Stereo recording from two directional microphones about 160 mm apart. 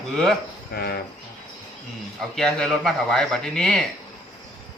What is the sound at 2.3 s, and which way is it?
A man's voice, centre (ahead or behind).